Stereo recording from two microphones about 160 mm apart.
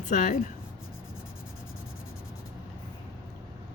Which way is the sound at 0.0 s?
55° left (ahead or behind).